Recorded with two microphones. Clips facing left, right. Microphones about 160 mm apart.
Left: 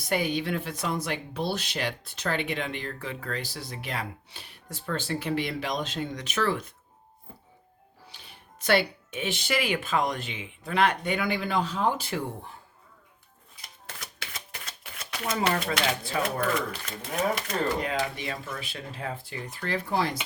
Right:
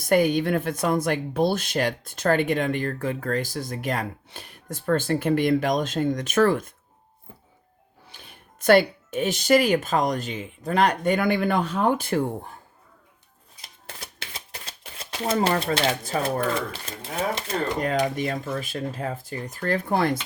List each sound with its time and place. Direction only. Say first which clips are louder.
0.0 s speech: right 8 dB; 50° right (ahead or behind)
8.1 s speech: right 5 dB; 50° right (ahead or behind)
13.8 s typewriter: right 2 dB; 30° right (ahead or behind)
16.0 s speech: right 3 dB; 35° right (ahead or behind)
18.2 s speech: right 8 dB; 45° right (ahead or behind)